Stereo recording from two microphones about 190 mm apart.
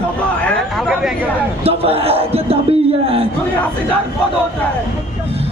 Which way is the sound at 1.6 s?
30° right (ahead or behind).